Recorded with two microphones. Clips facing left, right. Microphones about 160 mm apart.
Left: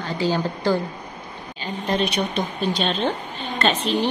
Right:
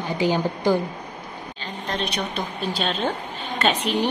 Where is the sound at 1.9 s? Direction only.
5° left (ahead or behind).